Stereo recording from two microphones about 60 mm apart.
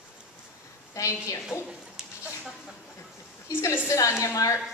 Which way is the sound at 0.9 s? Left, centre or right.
Left.